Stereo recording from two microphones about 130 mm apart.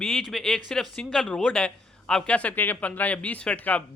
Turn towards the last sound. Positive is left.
turn(degrees=10)  # may be behind; listen again after turning